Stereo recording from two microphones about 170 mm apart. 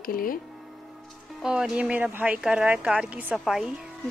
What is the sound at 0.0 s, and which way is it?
Speech, 55° left (ahead or behind).